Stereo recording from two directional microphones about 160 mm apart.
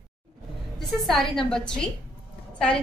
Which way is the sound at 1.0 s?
Centre (ahead or behind).